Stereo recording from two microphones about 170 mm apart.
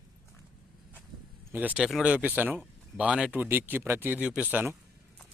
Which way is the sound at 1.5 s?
10° right (ahead or behind).